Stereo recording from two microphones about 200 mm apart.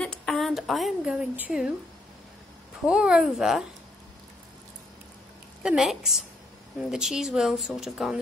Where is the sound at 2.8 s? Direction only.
5° right (ahead or behind).